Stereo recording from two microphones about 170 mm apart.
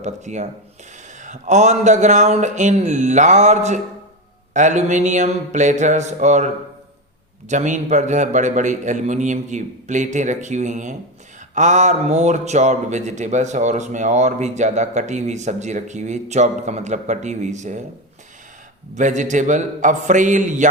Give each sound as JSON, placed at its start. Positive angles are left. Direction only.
{"t": 0.0, "sound": "speech", "side_deg": -45}
{"t": 18.9, "sound": "speech", "side_deg": -45}